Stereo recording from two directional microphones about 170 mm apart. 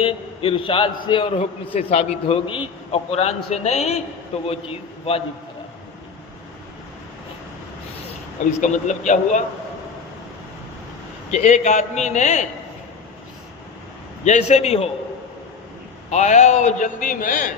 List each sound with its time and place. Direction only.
0.0 s a man's voice: 30° left (ahead or behind)
8.5 s a man's voice: 45° left (ahead or behind)
11.3 s a man's voice: 45° left (ahead or behind)
14.2 s a man's voice: 40° left (ahead or behind)
16.1 s a man's voice: 45° left (ahead or behind)